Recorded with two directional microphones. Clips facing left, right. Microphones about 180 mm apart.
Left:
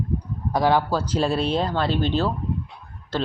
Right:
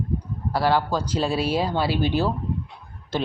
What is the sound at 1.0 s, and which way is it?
Speech, 10° right (ahead or behind).